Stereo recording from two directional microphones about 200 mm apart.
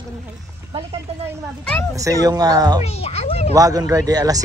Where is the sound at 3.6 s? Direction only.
15° right (ahead or behind).